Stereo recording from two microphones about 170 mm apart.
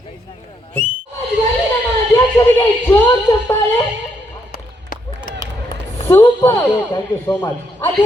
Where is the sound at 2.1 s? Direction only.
10° left (ahead or behind).